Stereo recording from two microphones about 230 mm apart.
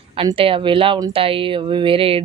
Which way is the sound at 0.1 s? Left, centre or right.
Right.